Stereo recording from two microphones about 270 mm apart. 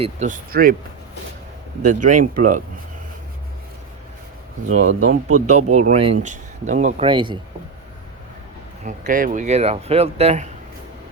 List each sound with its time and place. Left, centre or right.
0.0 s speech: right
1.8 s speech: right
4.9 s speech: right
5.7 s speech: right
8.8 s speech: right